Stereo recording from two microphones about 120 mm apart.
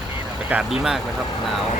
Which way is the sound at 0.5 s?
10° right (ahead or behind).